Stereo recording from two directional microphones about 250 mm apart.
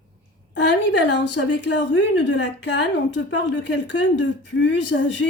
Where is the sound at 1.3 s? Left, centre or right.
Left.